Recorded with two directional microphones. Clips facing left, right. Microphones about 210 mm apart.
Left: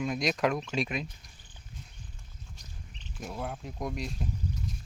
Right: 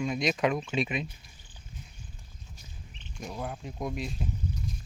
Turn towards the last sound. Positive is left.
turn(degrees=0)  # may be behind; listen again after turning